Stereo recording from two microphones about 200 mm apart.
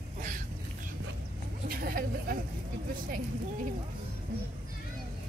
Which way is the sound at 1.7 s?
45° right (ahead or behind).